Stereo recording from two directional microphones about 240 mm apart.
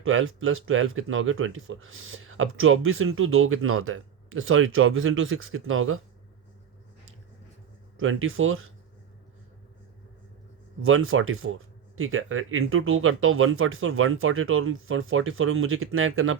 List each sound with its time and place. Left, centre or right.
0.0 s speech: right
7.9 s speech: right
10.8 s speech: right